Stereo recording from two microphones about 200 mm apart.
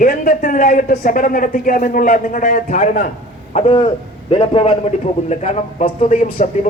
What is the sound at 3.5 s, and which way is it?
A man's voice, 30° left (ahead or behind).